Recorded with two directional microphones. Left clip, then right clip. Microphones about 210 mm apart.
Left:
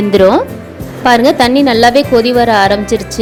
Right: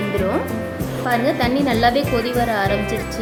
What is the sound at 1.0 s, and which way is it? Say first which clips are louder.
A woman's voice: left 12 dB; 40° left (ahead or behind).